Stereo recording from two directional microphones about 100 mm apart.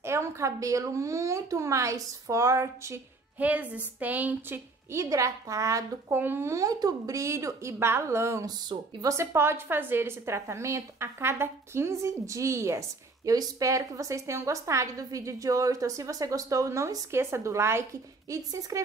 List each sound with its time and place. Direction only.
0.0 s speech: 25° right (ahead or behind)
3.3 s speech: 15° right (ahead or behind)
4.9 s speech: 30° right (ahead or behind)
6.0 s speech: 20° right (ahead or behind)